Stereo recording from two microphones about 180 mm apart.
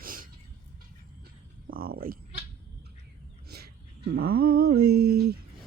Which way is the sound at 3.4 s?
60° right (ahead or behind).